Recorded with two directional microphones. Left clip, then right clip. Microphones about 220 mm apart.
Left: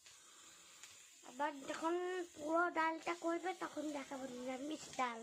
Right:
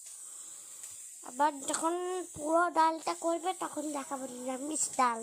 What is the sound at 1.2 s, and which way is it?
Speech, 30° right (ahead or behind).